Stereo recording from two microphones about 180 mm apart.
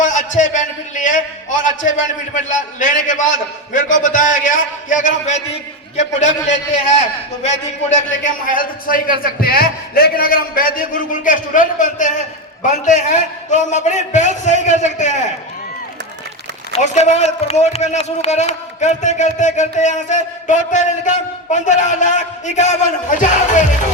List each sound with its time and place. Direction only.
0.0 s a man's voice: 45° left (ahead or behind)
16.7 s speech: 40° left (ahead or behind)